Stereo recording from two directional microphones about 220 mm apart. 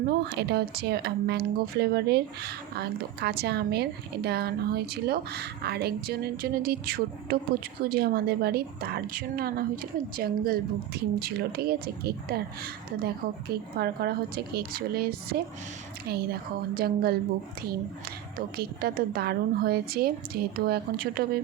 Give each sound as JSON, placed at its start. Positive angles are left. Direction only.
{"t": 0.3, "sound": "speech", "side_deg": -50}
{"t": 18.3, "sound": "speech", "side_deg": -45}